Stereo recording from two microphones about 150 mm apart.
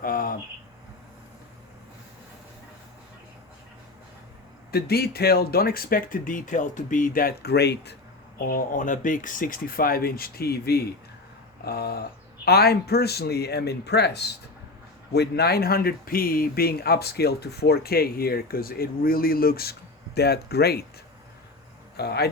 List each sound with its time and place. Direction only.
0.0 s a sound: 70° left (ahead or behind)
4.7 s speech: 90° left
8.4 s speech: 65° left (ahead or behind); by 20.8 s 90° left
21.9 s speech: 90° left